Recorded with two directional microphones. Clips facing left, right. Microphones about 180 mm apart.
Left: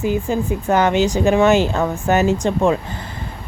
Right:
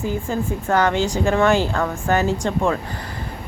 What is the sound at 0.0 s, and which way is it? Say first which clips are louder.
Speech: left 4 dB; 15° left (ahead or behind).